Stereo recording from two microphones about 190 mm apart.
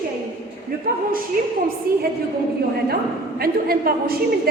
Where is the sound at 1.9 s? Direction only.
50° right (ahead or behind).